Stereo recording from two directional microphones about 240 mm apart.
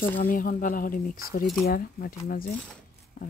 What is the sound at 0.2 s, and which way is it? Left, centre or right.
Speech, left.